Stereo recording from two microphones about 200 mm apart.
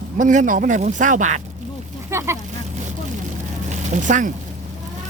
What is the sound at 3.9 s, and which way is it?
Speech, 40° right (ahead or behind).